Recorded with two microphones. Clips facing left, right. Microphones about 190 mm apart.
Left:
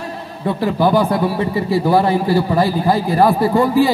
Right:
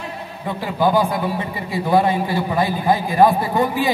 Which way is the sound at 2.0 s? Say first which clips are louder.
Even; 20° right (ahead or behind).